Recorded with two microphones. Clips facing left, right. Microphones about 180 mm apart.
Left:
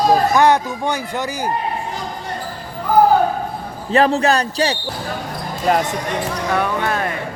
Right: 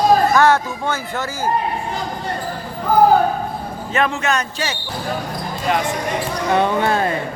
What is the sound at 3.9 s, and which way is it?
Speech, 35° left (ahead or behind).